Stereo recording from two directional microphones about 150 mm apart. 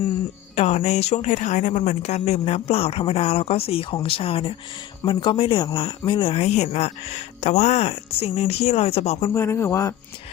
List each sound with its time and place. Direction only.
0.5 s a man's voice: 45° left (ahead or behind)
9.3 s speech: 15° left (ahead or behind)